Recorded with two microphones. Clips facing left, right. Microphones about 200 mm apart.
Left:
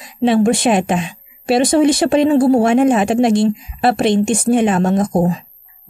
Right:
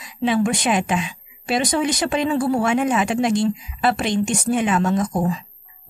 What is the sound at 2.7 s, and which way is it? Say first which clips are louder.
A woman's voice: left 7 dB; 50° left (ahead or behind).